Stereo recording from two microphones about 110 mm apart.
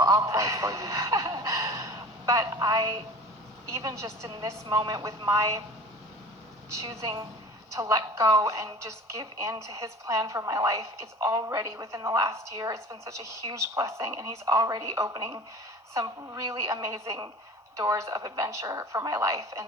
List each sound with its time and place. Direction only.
0.0 s a woman's voice: 30° right (ahead or behind)
6.8 s a woman's voice: 30° right (ahead or behind)